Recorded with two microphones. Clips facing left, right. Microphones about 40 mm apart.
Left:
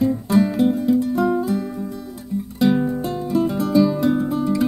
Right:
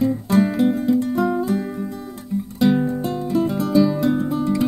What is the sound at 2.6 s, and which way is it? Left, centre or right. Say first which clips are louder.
Music: even; centre.